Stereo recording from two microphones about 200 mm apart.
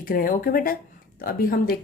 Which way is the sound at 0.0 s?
45° left (ahead or behind).